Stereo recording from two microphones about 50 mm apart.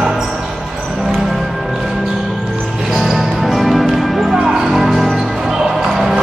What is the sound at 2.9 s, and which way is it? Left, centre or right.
Music, centre.